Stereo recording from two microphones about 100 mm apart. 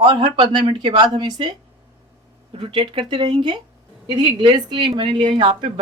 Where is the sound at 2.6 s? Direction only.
60° right (ahead or behind).